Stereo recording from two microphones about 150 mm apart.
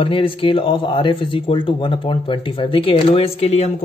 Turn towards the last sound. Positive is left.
turn(degrees=45)  # may be behind; listen again after turning